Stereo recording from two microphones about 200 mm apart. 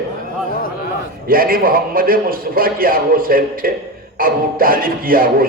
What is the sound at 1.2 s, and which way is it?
Speech, 45° right (ahead or behind).